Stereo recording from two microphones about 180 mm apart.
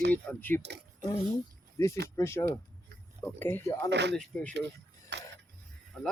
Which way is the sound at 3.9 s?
70° right (ahead or behind).